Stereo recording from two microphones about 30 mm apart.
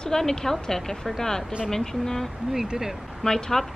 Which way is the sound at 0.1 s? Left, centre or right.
Centre.